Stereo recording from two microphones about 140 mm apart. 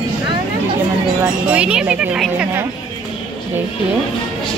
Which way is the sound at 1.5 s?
10° right (ahead or behind).